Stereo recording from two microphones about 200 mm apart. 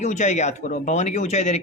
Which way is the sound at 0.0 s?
35° left (ahead or behind).